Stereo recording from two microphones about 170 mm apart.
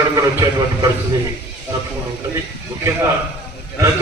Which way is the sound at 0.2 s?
20° right (ahead or behind).